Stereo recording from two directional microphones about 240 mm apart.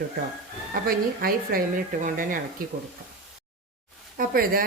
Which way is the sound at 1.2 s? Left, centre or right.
Right.